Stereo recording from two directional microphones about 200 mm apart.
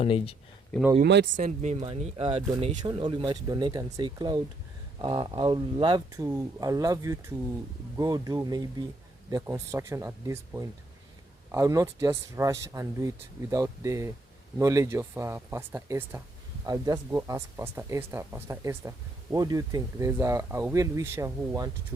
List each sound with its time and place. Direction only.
0.0 s speech: 30° left (ahead or behind)
1.0 s speech: 60° right (ahead or behind)
1.4 s speech: 35° right (ahead or behind); by 21.7 s 15° right (ahead or behind)